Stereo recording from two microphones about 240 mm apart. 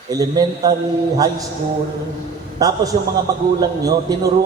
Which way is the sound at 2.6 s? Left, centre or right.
Centre.